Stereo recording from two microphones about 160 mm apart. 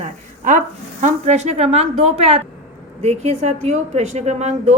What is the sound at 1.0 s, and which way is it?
A woman's voice, 45° right (ahead or behind).